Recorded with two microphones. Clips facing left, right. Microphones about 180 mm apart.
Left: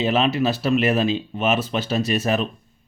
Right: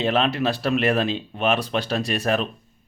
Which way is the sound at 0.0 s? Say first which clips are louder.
Left 2 dB; 5° left (ahead or behind).